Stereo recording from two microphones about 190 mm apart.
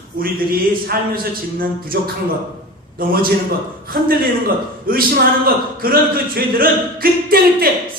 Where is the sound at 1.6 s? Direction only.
50° right (ahead or behind).